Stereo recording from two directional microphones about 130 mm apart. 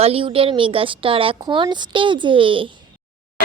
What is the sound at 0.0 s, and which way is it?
Speech, 45° right (ahead or behind).